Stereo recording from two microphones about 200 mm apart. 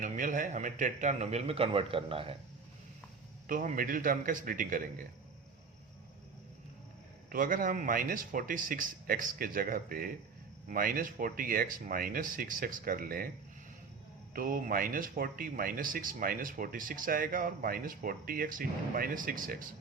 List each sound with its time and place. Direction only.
0.0 s speech: 40° right (ahead or behind)
3.4 s speech: 40° right (ahead or behind)
7.3 s speech: 45° right (ahead or behind)
14.3 s speech: 45° right (ahead or behind)